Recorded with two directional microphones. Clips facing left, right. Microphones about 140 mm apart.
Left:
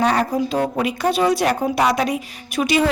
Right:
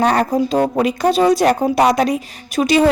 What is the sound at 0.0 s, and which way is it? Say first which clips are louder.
A woman's voice: right 3 dB; 45° right (ahead or behind).